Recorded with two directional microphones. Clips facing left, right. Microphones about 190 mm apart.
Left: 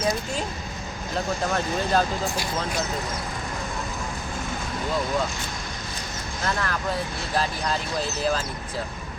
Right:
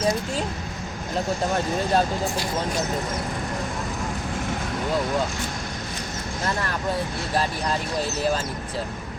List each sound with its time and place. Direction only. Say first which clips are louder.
1.5 s speech: right 1 dB; 25° right (ahead or behind)